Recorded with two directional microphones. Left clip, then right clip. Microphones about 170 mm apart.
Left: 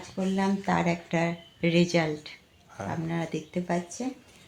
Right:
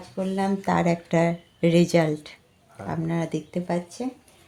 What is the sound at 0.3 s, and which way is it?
Speech, 70° right (ahead or behind).